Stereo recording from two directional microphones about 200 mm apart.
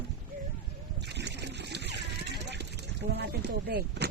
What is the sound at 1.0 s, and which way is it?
Water, 60° right (ahead or behind).